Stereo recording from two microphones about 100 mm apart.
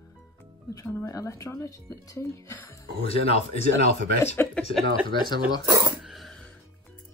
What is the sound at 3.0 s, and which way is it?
Speech, 90° left.